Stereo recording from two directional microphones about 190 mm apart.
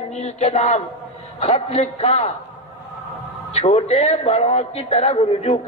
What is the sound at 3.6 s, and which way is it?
A man's voice, 30° left (ahead or behind).